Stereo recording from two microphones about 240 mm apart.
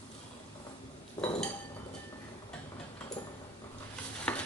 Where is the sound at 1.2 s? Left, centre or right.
Centre.